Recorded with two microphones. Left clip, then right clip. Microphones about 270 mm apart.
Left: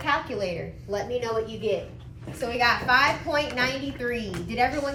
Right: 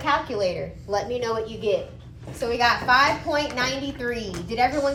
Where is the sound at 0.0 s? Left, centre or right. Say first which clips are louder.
Right 3 dB; centre.